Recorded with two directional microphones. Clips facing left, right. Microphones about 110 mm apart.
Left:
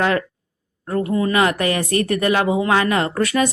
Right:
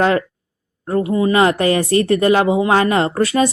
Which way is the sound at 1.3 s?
30° right (ahead or behind).